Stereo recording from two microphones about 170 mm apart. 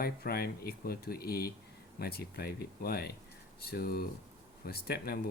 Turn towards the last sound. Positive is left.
turn(degrees=65)  # may be behind; listen again after turning